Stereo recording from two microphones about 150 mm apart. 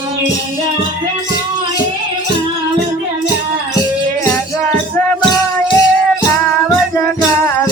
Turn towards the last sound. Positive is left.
turn(degrees=25)  # may be behind; listen again after turning